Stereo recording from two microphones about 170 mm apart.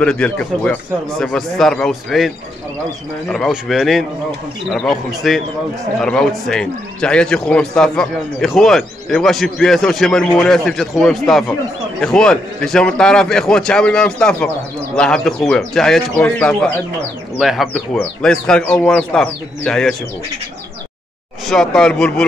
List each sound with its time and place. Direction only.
0.0 s speech: 5° left (ahead or behind)
21.5 s speech: 5° left (ahead or behind)